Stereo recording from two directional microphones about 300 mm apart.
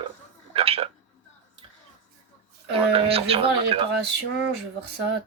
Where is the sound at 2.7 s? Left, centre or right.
Centre.